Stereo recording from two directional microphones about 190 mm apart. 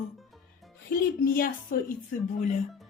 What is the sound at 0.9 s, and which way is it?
Speech, 50° left (ahead or behind).